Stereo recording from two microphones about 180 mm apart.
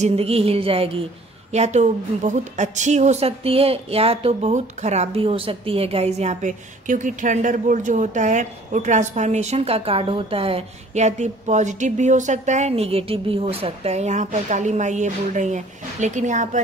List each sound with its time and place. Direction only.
0.0 s a woman's voice: 35° right (ahead or behind)